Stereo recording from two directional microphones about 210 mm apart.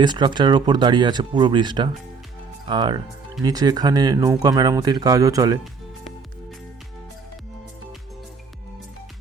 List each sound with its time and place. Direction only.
0.0 s speech: 20° right (ahead or behind)